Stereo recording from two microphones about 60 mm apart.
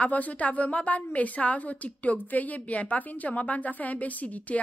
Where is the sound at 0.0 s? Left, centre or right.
Left.